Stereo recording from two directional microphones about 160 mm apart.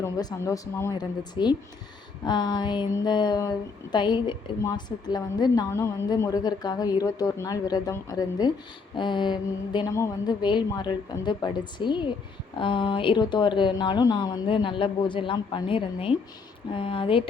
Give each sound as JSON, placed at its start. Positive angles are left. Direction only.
{"t": 0.0, "sound": "a woman's voice", "side_deg": 20}